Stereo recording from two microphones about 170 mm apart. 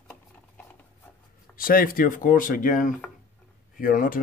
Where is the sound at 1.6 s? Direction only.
55° left (ahead or behind).